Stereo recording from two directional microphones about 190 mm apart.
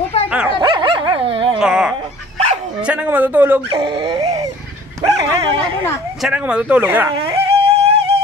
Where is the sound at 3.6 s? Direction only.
30° right (ahead or behind).